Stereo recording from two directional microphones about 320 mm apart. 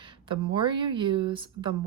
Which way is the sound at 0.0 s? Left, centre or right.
Centre.